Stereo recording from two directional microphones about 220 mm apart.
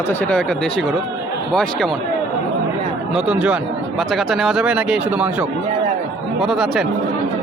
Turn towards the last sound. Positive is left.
turn(degrees=0)  # may be behind; listen again after turning